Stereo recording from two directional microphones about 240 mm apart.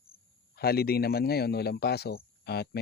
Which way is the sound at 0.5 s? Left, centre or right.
Left.